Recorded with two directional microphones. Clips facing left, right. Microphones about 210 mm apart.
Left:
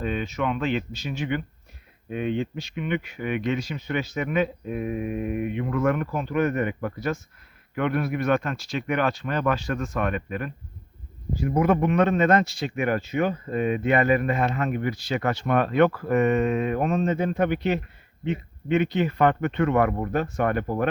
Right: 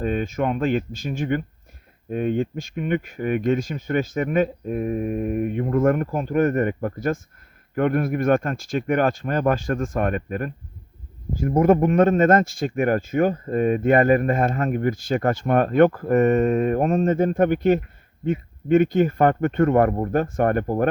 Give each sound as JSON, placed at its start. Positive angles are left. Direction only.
{"t": 0.0, "sound": "speech", "side_deg": -45}
{"t": 20.1, "sound": "speech", "side_deg": -50}